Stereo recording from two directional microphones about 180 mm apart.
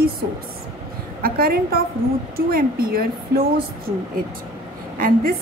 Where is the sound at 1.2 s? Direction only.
55° right (ahead or behind).